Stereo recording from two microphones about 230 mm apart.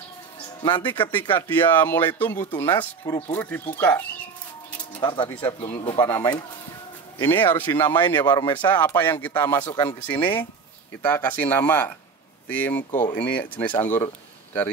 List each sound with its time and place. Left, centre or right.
0.6 s speech: centre
1.3 s speech: centre
5.0 s speech: centre